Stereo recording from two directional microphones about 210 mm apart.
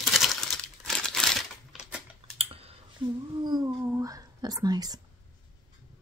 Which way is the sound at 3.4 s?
20° right (ahead or behind).